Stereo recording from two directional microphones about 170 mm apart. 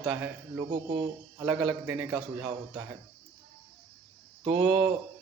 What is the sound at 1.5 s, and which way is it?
A man's voice, 5° right (ahead or behind).